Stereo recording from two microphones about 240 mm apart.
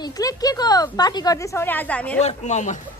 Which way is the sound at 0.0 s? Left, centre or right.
Centre.